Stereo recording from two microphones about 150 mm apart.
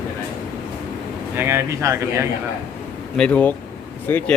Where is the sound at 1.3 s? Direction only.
15° right (ahead or behind).